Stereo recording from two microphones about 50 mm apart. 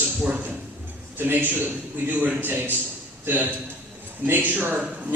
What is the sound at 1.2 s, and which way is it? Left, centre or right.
A man's voice, right.